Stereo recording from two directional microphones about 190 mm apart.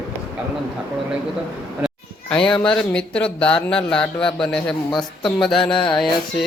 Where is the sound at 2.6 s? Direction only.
5° left (ahead or behind).